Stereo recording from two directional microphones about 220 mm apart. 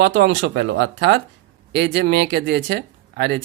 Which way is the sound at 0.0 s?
45° right (ahead or behind).